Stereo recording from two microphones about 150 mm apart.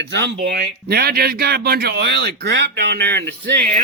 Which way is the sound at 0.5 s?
90° right.